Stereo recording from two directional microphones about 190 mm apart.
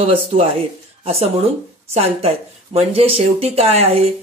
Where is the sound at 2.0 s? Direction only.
35° right (ahead or behind).